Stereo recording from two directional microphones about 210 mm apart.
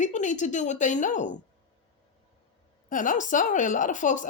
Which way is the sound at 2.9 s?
40° left (ahead or behind).